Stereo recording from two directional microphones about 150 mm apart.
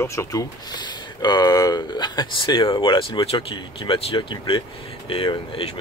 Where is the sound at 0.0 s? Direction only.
20° left (ahead or behind).